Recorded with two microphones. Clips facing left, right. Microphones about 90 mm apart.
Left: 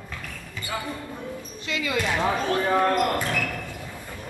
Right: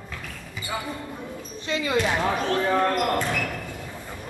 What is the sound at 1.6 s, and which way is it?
Basketball bounce, 30° right (ahead or behind).